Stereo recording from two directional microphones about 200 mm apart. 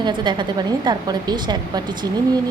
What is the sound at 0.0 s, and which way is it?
A woman's voice, 25° right (ahead or behind).